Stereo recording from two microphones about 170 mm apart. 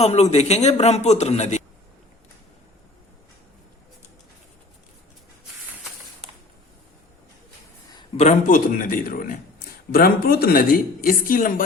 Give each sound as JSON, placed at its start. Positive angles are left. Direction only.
{"t": 0.0, "sound": "speech", "side_deg": 40}
{"t": 7.9, "sound": "a man's voice", "side_deg": 35}